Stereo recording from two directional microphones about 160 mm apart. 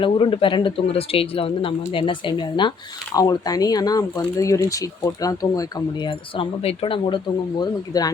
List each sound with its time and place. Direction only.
0.0 s speech: 30° left (ahead or behind)